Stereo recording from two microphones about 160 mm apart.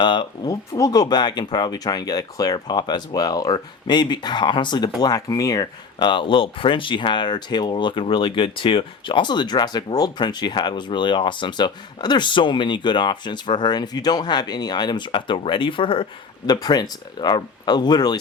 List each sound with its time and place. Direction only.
0.0 s speech: 30° left (ahead or behind)